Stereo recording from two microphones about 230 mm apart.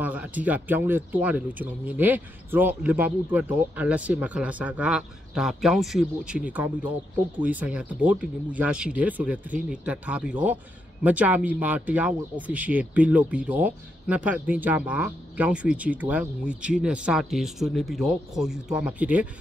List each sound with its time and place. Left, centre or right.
0.0 s speech: centre